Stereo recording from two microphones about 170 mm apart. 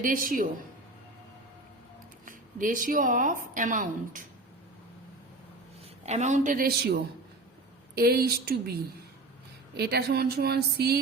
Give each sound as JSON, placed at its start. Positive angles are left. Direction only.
{"t": 0.0, "sound": "speech", "side_deg": -55}
{"t": 2.2, "sound": "speech", "side_deg": -50}
{"t": 6.0, "sound": "speech", "side_deg": -40}